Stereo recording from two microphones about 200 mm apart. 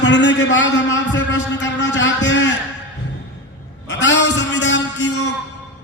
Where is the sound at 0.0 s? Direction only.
60° left (ahead or behind).